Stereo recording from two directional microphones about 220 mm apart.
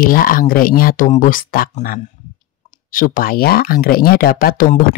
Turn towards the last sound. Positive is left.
turn(degrees=40)  # may be behind; listen again after turning